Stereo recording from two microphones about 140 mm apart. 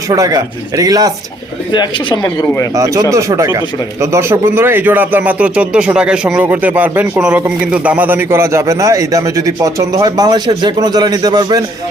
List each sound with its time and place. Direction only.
0.1 s speech: 25° right (ahead or behind)
1.7 s speech: 30° left (ahead or behind)
2.7 s a man's voice: 25° right (ahead or behind)